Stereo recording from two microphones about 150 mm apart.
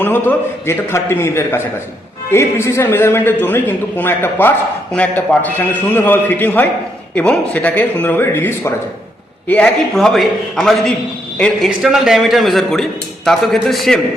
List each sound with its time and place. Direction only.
0.0 s a man's voice: 10° left (ahead or behind)